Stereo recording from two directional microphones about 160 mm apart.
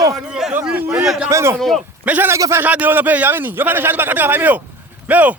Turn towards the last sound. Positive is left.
turn(degrees=-10)  # may be behind; listen again after turning